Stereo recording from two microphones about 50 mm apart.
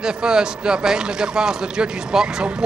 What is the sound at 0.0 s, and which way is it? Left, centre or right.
A man's voice, centre.